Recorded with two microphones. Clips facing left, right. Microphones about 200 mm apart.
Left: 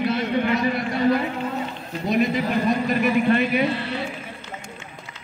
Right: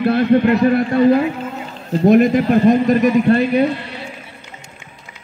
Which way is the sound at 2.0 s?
50° right (ahead or behind).